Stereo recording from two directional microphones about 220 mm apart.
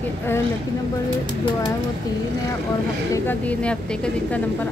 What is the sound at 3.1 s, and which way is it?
Speech, 5° left (ahead or behind).